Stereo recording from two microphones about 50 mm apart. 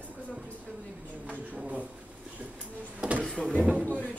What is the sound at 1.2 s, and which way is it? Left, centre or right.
Speech, right.